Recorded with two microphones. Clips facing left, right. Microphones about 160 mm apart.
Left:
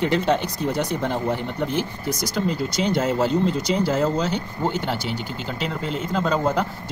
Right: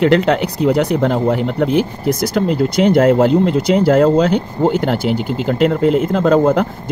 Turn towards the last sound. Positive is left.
turn(degrees=-55)  # may be behind; listen again after turning